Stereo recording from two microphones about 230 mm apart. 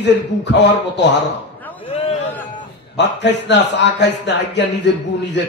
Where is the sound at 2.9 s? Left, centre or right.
Left.